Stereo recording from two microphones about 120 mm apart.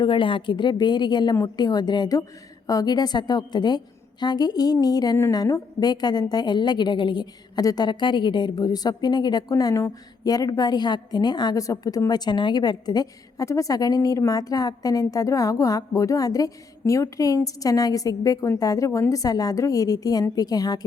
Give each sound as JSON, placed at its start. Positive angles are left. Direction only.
{"t": 0.0, "sound": "a woman's voice", "side_deg": 45}